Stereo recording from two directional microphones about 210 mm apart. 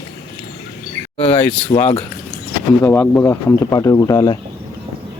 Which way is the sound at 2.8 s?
10° left (ahead or behind).